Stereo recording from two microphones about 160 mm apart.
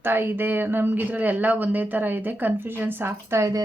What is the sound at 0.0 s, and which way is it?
A woman's voice, 15° right (ahead or behind).